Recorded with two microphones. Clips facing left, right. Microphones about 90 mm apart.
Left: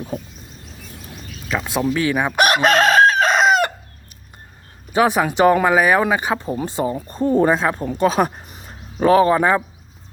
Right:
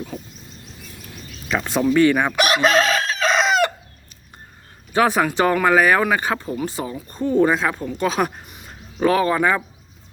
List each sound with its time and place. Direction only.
1.5 s speech: 5° left (ahead or behind)
2.3 s chicken: 55° left (ahead or behind)
4.9 s speech: 15° left (ahead or behind)
6.5 s speech: 30° left (ahead or behind)